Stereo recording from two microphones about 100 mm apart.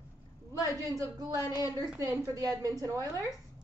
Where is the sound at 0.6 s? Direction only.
35° right (ahead or behind).